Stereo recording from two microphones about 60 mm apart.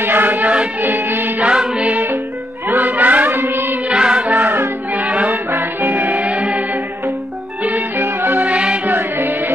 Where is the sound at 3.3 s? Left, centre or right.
Right.